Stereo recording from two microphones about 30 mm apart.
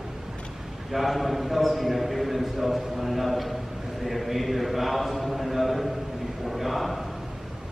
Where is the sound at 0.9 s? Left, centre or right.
Centre.